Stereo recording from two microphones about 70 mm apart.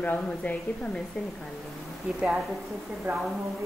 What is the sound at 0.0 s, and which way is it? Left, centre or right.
Speech, left.